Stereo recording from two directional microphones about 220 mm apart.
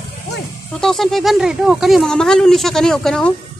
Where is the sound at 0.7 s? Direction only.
Centre (ahead or behind).